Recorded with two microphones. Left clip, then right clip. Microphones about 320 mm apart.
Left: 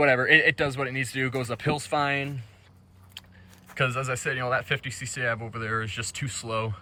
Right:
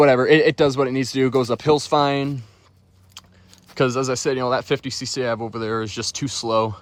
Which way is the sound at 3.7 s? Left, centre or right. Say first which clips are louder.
Right 7 dB; centre.